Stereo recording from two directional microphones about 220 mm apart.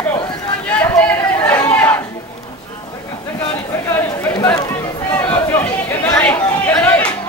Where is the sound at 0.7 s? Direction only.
5° left (ahead or behind).